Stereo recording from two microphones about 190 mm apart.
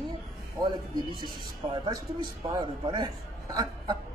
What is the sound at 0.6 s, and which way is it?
Speech, 25° right (ahead or behind).